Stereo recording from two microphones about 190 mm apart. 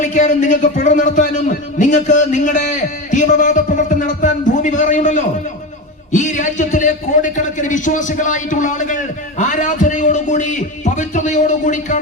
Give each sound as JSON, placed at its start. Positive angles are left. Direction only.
{"t": 0.0, "sound": "a man's voice", "side_deg": 40}